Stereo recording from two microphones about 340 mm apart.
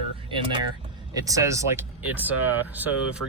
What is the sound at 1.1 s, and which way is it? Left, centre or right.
Speech, centre.